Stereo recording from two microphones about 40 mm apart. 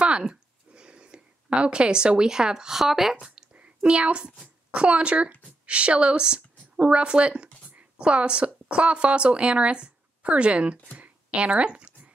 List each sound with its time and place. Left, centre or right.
0.0 s speech: right
3.5 s a sound: right
4.6 s a woman's voice: right